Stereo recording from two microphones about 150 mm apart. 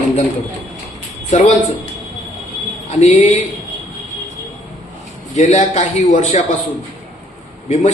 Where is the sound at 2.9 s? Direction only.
50° left (ahead or behind).